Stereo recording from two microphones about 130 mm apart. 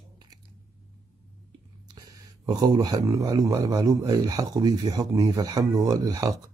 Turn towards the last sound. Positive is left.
turn(degrees=-25)  # may be behind; listen again after turning